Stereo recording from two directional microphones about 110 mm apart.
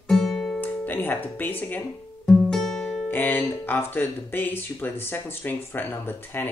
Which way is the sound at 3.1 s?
20° left (ahead or behind).